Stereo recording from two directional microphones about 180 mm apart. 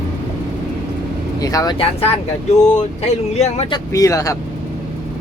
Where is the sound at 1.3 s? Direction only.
20° left (ahead or behind).